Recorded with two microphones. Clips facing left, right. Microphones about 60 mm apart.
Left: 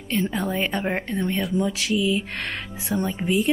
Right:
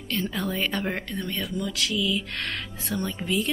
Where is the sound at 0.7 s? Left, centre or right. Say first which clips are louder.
Left 3 dB; left.